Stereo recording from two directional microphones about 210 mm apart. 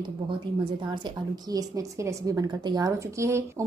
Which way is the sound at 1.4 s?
15° right (ahead or behind).